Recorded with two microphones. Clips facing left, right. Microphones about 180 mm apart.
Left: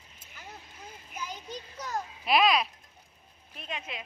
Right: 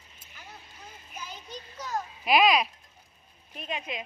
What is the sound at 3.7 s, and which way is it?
Speech, 15° right (ahead or behind).